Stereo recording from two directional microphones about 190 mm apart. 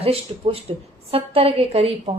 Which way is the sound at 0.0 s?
30° right (ahead or behind).